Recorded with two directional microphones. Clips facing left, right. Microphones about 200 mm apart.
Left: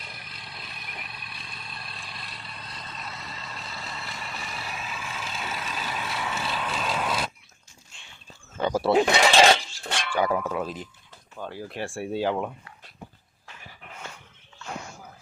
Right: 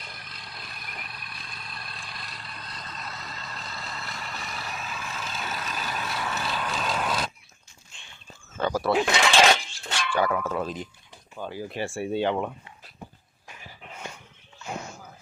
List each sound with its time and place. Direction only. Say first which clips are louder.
0.0 s a sound: even; centre (ahead or behind)
8.6 s wild animals: left 2 dB; 25° left (ahead or behind)
9.0 s cutlery: left 4 dB; 35° left (ahead or behind)
10.2 s speech: left 1 dB; 20° left (ahead or behind)
10.5 s speech: right 1 dB; 5° left (ahead or behind)